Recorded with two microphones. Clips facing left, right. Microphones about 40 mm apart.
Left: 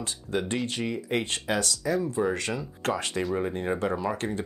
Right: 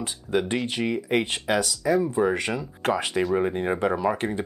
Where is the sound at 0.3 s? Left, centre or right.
Right.